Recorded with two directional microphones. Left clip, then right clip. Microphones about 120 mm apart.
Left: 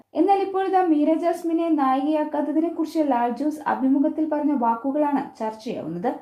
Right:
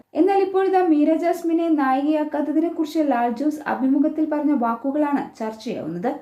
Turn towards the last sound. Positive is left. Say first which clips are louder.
# right 1 dB
turn(degrees=20)  # may be behind; listen again after turning